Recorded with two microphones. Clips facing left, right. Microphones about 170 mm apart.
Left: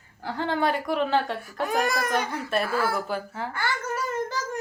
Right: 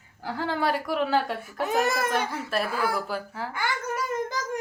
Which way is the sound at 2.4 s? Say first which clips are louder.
Left 2 dB; centre (ahead or behind).